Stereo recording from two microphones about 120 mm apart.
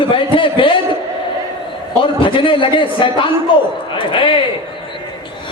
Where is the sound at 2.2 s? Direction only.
45° left (ahead or behind).